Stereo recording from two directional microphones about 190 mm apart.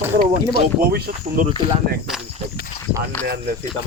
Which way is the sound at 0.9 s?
55° right (ahead or behind).